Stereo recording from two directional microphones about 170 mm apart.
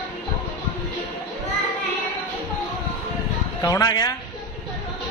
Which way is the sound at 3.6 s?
20° left (ahead or behind).